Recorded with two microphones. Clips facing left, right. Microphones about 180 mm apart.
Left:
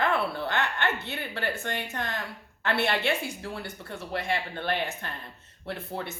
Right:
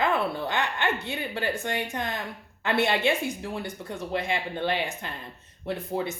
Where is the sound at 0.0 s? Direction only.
15° right (ahead or behind).